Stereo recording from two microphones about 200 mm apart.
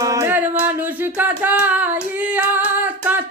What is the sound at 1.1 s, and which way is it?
Female singing, 10° right (ahead or behind).